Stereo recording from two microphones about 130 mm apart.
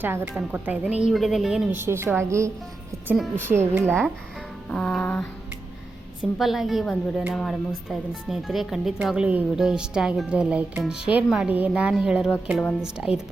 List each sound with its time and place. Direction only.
0.0 s a woman's voice: 20° right (ahead or behind); by 1.7 s centre (ahead or behind)
1.7 s a woman's voice: 20° right (ahead or behind)
4.7 s music: 5° left (ahead or behind)
6.4 s a woman's voice: centre (ahead or behind)